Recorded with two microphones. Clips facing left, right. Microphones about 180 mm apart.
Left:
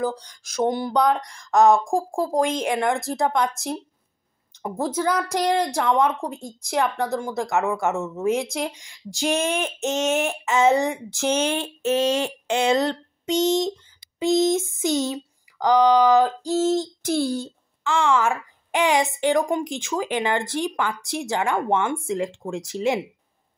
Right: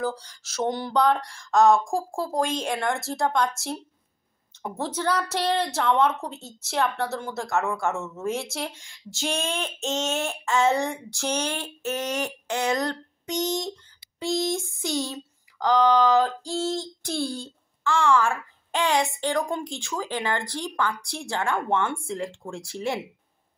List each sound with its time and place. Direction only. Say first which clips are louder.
0.0 s a woman's voice: left 3 dB; 15° left (ahead or behind)